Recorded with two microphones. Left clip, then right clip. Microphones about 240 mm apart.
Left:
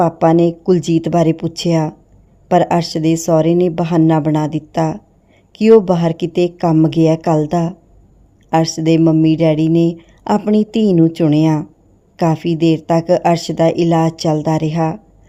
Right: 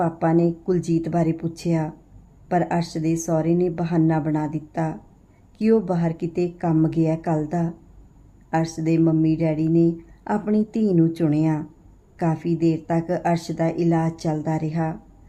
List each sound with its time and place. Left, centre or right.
0.0 s speech: left